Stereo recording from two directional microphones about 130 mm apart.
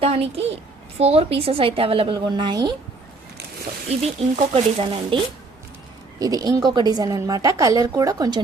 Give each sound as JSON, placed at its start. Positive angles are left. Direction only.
{"t": 0.0, "sound": "speech", "side_deg": -50}
{"t": 2.1, "sound": "a woman's voice", "side_deg": -35}
{"t": 3.8, "sound": "speech", "side_deg": -55}
{"t": 6.1, "sound": "a woman's voice", "side_deg": -30}